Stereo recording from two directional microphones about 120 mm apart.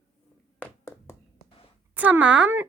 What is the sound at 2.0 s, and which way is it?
Speech, 10° right (ahead or behind).